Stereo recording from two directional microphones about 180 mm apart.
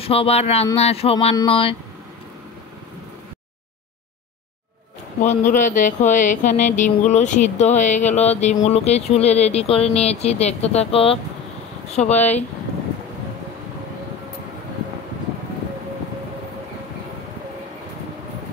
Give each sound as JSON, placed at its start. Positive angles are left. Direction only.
{"t": 0.0, "sound": "speech", "side_deg": 35}
{"t": 5.2, "sound": "speech", "side_deg": 40}